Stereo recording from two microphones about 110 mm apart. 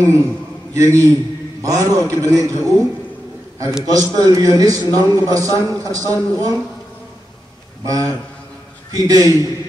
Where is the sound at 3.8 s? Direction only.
35° right (ahead or behind).